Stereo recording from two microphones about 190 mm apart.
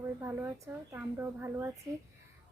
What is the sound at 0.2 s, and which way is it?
A woman's voice, 15° right (ahead or behind).